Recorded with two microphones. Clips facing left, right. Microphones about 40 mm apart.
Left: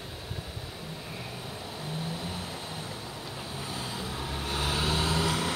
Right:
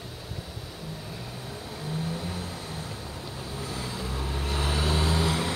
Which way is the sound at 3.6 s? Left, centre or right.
Left.